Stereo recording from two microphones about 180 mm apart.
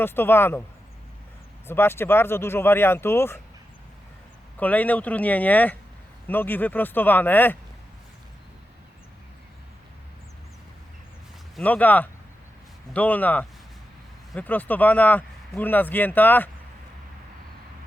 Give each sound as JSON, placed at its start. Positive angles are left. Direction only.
{"t": 0.0, "sound": "speech", "side_deg": 10}
{"t": 1.6, "sound": "speech", "side_deg": 15}
{"t": 4.5, "sound": "speech", "side_deg": 10}
{"t": 11.5, "sound": "speech", "side_deg": 10}